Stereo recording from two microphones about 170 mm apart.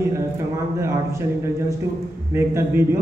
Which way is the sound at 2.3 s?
15° right (ahead or behind).